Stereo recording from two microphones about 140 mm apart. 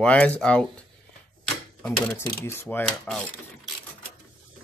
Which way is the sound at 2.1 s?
20° left (ahead or behind).